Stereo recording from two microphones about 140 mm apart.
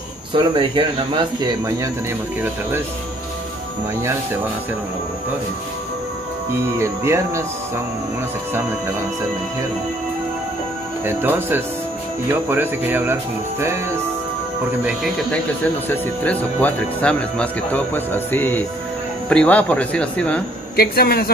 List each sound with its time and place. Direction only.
0.3 s speech: 35° right (ahead or behind)
4.0 s music: 20° right (ahead or behind)
6.8 s music: 20° right (ahead or behind)
11.1 s speech: 15° right (ahead or behind)
15.3 s speech: 10° left (ahead or behind)
20.7 s a man's voice: 90° left